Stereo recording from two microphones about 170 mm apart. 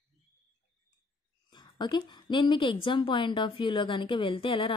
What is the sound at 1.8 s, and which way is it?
A woman's voice, 25° left (ahead or behind).